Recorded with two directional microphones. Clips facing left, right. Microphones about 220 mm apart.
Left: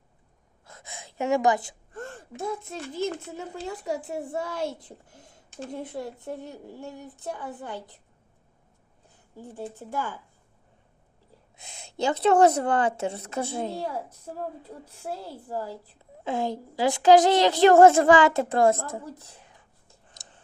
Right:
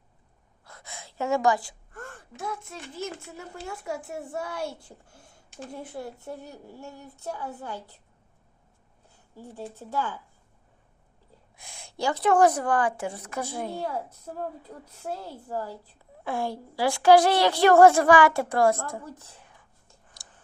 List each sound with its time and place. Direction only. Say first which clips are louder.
0.6 s gasp: left 1 dB; 20° left (ahead or behind)
2.5 s a child's voice: left 4 dB; 25° left (ahead or behind)
9.3 s speech: left 2 dB; 15° left (ahead or behind)
11.5 s a child's voice: left 3 dB; 20° left (ahead or behind)
14.7 s a child's voice: even; 10° left (ahead or behind)
19.2 s a sound: left 1 dB; 15° left (ahead or behind)